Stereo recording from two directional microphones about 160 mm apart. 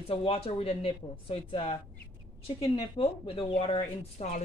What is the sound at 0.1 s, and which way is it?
A woman's voice, 35° left (ahead or behind).